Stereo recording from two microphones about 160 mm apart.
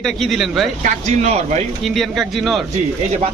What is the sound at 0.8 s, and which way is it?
Speech, 45° right (ahead or behind).